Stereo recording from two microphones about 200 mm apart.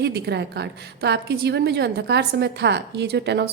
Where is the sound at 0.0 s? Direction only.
55° right (ahead or behind).